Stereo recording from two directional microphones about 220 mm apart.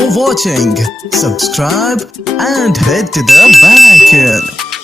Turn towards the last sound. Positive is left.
turn(degrees=0)  # may be behind; listen again after turning